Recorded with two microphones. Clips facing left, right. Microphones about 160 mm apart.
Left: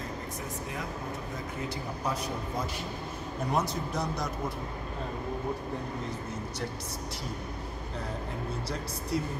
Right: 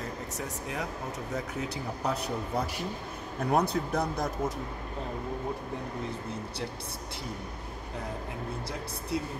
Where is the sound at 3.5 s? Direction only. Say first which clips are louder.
Right 4 dB; 60° right (ahead or behind).